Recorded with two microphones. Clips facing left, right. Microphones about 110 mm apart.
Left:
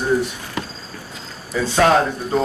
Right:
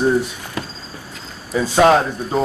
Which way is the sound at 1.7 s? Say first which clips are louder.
Right 2 dB; 15° right (ahead or behind).